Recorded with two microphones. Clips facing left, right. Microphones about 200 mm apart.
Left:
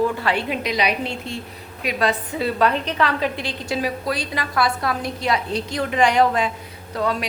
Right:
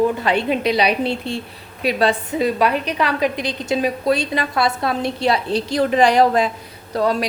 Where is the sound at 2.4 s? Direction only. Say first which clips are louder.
Right 2 dB; 15° right (ahead or behind).